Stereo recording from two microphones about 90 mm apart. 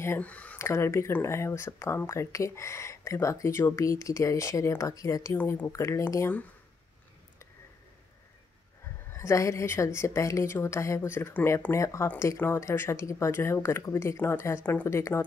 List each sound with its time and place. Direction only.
0.2 s speech: 15° left (ahead or behind)
0.6 s speech: 30° left (ahead or behind)
5.4 s speech: 25° left (ahead or behind)
5.7 s speech: 35° left (ahead or behind)
9.1 s speech: 35° left (ahead or behind)